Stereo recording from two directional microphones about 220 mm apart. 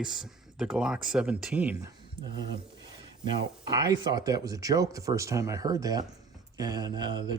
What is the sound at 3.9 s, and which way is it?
Speech, 20° right (ahead or behind).